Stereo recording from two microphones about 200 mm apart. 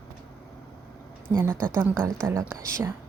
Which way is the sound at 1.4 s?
15° right (ahead or behind).